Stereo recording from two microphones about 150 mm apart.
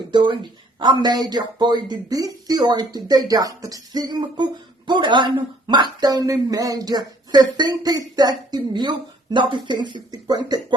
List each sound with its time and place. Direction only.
0.1 s speech: 30° right (ahead or behind)